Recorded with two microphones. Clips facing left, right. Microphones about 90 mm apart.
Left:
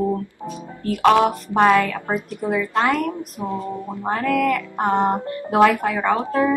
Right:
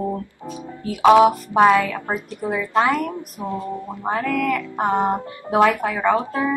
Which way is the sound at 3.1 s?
20° left (ahead or behind).